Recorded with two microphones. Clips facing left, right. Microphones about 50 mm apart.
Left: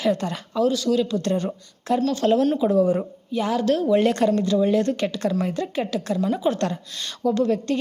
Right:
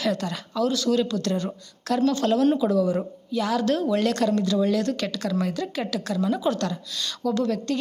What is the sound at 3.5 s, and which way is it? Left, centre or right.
A woman's voice, centre.